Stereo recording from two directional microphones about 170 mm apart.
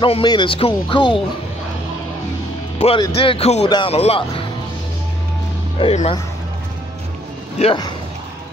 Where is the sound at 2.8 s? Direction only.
35° left (ahead or behind).